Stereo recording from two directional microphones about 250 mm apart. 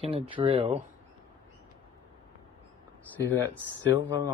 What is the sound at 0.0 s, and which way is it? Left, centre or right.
Speech, right.